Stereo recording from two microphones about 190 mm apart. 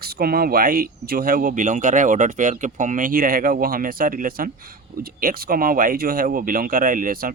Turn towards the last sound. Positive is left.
turn(degrees=-50)  # may be behind; listen again after turning